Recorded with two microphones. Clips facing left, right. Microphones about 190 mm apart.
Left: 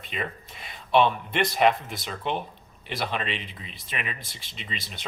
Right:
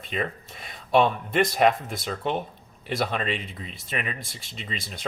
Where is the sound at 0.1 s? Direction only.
40° right (ahead or behind).